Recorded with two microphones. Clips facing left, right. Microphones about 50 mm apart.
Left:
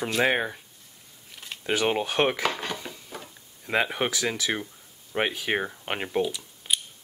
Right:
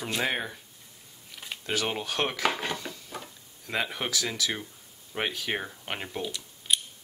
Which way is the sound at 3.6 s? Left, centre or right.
Left.